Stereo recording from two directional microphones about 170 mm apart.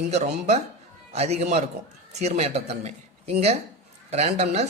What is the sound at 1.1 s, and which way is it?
A man's voice, 40° right (ahead or behind).